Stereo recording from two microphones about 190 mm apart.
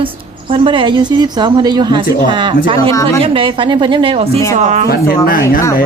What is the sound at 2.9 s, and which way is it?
Speech, 15° left (ahead or behind).